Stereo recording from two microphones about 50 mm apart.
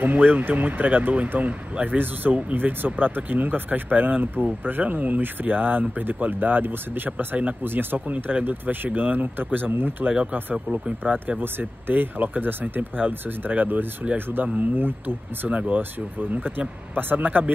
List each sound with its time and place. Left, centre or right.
0.0 s speech: right
8.1 s speech: right
10.7 s speech: right
11.4 s speech: right
15.5 s speech: right
15.8 s speech: right